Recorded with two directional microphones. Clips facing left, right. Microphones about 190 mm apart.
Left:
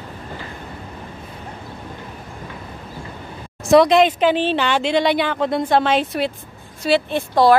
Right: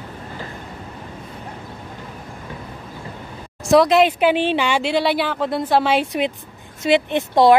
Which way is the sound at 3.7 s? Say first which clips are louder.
Left 1 dB; centre (ahead or behind).